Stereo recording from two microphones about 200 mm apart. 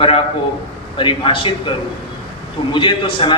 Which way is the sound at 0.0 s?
30° left (ahead or behind).